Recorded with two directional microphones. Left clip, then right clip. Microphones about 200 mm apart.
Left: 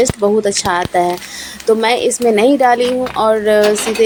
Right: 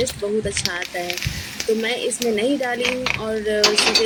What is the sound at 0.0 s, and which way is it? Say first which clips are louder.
A woman's voice: left 10 dB; 20° left (ahead or behind).